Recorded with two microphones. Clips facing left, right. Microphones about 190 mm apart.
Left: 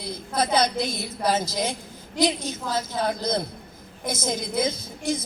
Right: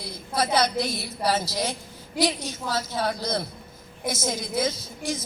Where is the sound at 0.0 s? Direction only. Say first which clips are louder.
Left 1 dB; 20° left (ahead or behind).